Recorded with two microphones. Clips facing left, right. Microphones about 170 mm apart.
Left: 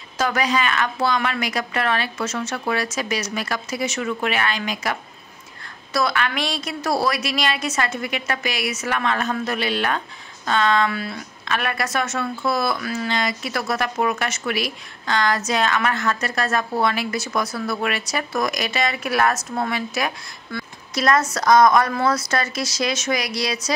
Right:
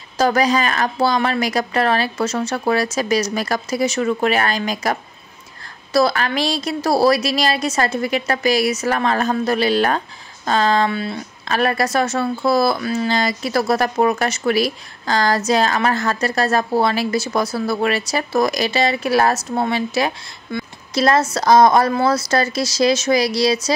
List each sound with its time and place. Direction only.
0.2 s speech: 35° right (ahead or behind)
5.9 s speech: 35° right (ahead or behind)
11.4 s speech: 35° right (ahead or behind)